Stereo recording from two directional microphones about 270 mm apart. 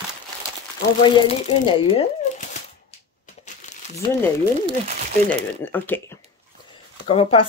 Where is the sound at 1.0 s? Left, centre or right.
Centre.